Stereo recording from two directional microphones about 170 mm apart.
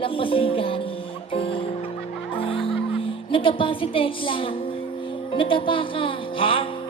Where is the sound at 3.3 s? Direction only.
30° left (ahead or behind).